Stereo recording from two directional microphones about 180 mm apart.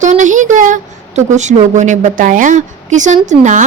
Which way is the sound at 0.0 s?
45° right (ahead or behind).